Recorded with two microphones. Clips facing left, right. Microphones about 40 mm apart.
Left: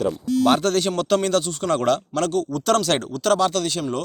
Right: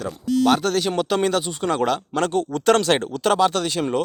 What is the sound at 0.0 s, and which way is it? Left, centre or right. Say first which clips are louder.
Speech: left 1 dB; centre.